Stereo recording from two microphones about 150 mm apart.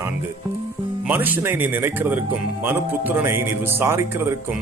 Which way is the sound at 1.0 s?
10° right (ahead or behind).